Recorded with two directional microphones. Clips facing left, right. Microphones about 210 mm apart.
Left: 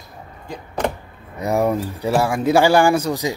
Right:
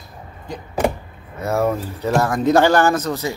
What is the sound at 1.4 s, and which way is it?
Speech, 15° left (ahead or behind).